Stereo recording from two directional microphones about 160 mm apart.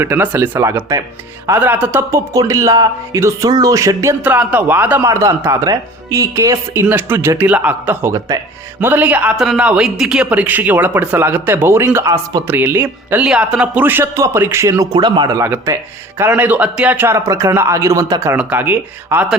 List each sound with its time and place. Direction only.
0.0 s a man's voice: 15° right (ahead or behind)